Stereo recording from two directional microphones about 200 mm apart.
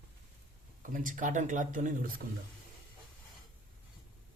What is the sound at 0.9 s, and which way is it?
Speech, 40° right (ahead or behind).